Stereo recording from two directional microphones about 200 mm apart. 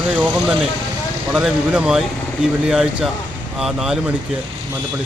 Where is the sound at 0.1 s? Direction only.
5° right (ahead or behind).